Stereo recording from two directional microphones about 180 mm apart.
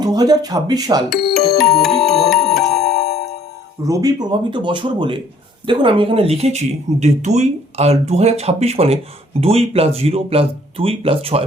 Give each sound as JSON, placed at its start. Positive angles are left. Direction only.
{"t": 0.0, "sound": "speech", "side_deg": -20}
{"t": 1.1, "sound": "speech", "side_deg": 60}
{"t": 1.8, "sound": "music", "side_deg": 0}
{"t": 2.7, "sound": "music", "side_deg": 60}
{"t": 3.8, "sound": "speech", "side_deg": -20}